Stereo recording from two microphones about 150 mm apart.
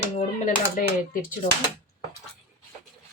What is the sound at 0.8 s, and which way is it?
Speech, 65° left (ahead or behind).